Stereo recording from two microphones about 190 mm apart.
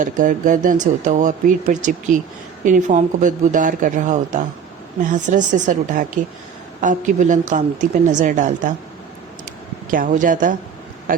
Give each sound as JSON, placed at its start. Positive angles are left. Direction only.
{"t": 0.0, "sound": "a woman's voice", "side_deg": -45}
{"t": 9.9, "sound": "speech", "side_deg": -45}